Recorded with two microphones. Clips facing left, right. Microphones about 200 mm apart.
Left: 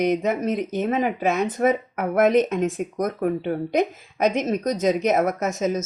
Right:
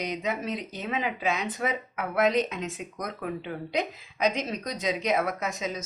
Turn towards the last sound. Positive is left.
turn(degrees=45)  # may be behind; listen again after turning